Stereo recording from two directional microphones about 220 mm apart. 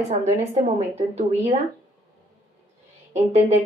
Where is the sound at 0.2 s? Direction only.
30° right (ahead or behind).